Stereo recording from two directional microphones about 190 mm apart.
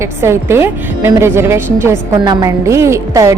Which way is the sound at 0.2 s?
15° right (ahead or behind).